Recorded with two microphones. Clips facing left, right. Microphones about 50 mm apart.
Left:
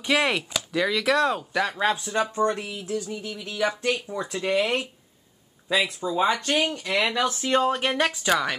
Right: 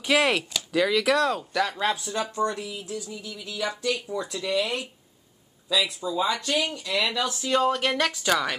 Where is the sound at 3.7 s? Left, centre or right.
Left.